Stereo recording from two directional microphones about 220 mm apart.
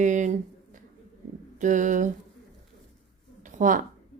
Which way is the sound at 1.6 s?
35° right (ahead or behind).